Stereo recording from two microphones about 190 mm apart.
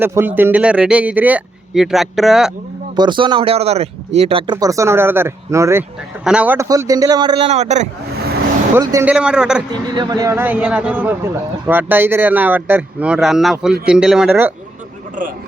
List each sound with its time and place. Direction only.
0.0 s speech: 10° right (ahead or behind)
2.9 s speech: 25° right (ahead or behind)
8.7 s speech: 15° right (ahead or behind)
9.7 s speech: 20° right (ahead or behind)